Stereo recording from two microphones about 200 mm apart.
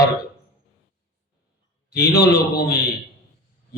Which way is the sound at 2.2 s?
50° left (ahead or behind).